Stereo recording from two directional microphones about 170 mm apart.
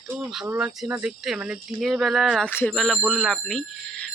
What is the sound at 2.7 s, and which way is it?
Speech, centre (ahead or behind).